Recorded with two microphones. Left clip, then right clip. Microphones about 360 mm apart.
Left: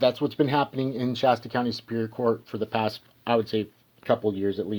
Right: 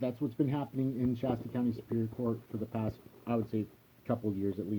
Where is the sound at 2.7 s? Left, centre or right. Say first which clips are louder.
Left 13 dB; centre.